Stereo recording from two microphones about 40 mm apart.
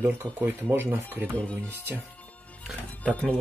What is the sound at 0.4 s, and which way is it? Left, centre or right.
Speech, right.